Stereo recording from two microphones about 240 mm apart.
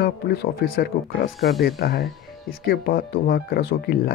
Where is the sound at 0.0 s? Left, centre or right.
Left.